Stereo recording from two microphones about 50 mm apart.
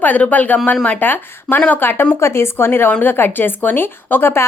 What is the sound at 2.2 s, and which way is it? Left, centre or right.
A woman's voice, left.